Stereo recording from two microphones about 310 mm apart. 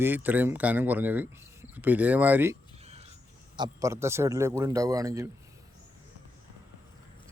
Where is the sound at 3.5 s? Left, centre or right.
Centre.